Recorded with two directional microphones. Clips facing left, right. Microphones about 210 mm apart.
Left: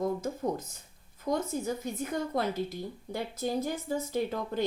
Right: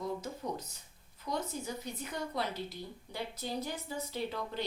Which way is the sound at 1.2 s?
50° left (ahead or behind).